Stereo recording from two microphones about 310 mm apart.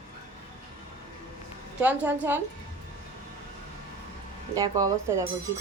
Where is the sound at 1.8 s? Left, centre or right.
Centre.